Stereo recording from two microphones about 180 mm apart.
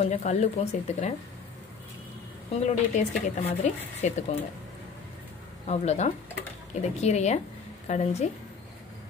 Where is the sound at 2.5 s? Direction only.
40° left (ahead or behind).